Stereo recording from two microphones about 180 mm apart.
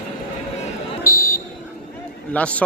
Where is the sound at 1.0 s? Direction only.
55° left (ahead or behind).